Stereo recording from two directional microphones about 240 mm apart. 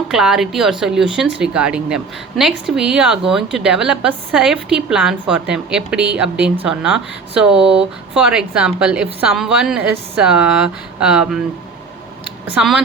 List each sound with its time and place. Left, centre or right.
0.1 s a woman's voice: centre
7.5 s speech: right
8.1 s a woman's voice: centre
12.5 s a woman's voice: centre